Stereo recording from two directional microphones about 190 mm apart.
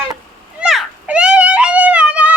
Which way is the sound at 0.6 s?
Centre (ahead or behind).